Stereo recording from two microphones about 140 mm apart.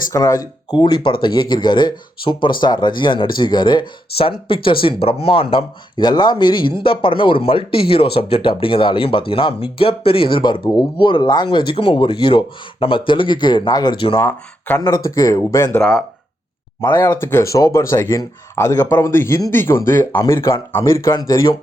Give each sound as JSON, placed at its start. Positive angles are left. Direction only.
{"t": 0.1, "sound": "speech", "side_deg": 25}
{"t": 14.2, "sound": "speech", "side_deg": 15}
{"t": 14.8, "sound": "speech", "side_deg": 25}
{"t": 15.8, "sound": "speech", "side_deg": 5}
{"t": 16.9, "sound": "speech", "side_deg": 15}